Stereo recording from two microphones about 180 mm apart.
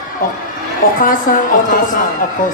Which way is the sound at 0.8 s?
55° left (ahead or behind).